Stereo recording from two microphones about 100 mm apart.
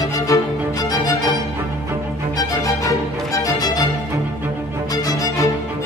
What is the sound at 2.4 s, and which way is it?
Music, 35° left (ahead or behind).